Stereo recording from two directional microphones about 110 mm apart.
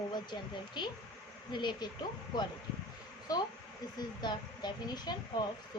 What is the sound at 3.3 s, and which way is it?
A woman's voice, 35° left (ahead or behind).